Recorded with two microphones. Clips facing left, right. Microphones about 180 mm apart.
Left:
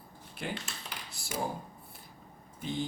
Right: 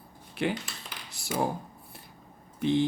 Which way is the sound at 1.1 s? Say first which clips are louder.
Right 7 dB; 70° right (ahead or behind).